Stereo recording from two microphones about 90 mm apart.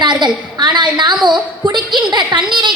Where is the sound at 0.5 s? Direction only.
55° right (ahead or behind).